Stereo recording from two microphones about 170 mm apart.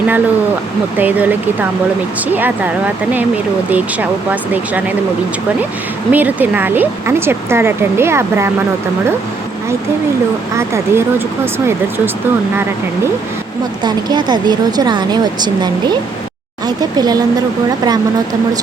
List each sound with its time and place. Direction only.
0.9 s speech: 10° right (ahead or behind)
4.3 s speech: 10° right (ahead or behind)
6.1 s speech: 10° right (ahead or behind)
10.5 s speech: 15° right (ahead or behind)
13.8 s speech: 25° right (ahead or behind)